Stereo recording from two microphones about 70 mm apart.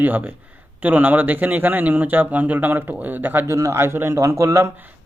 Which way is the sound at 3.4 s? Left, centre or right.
Right.